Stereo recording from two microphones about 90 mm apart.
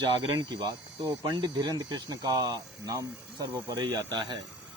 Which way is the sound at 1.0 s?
45° right (ahead or behind).